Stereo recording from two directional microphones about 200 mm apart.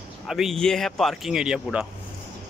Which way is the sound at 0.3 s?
Centre (ahead or behind).